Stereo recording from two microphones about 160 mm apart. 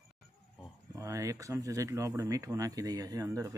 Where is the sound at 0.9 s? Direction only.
20° right (ahead or behind).